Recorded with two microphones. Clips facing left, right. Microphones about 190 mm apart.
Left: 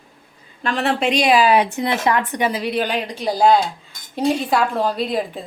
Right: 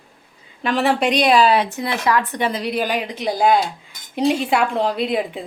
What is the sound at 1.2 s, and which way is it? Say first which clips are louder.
Speech: left 1 dB; 5° left (ahead or behind).